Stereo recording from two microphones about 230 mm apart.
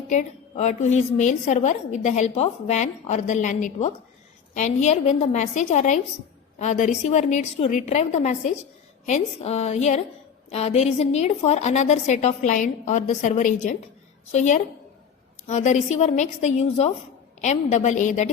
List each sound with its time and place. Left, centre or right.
0.1 s a woman's voice: left